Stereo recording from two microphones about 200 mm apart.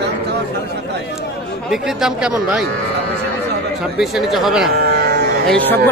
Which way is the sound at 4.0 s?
Centre (ahead or behind).